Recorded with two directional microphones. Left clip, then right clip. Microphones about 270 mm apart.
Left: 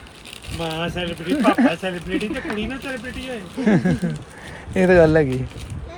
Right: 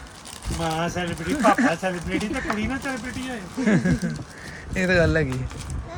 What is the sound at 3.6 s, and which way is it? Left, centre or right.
Speech, centre.